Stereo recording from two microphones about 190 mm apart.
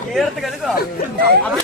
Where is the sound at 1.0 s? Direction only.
55° left (ahead or behind).